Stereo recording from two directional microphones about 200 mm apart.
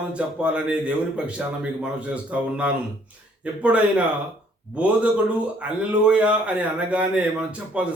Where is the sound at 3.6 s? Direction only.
5° right (ahead or behind).